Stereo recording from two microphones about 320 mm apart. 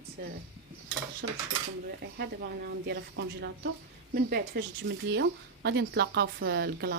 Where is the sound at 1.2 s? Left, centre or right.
Right.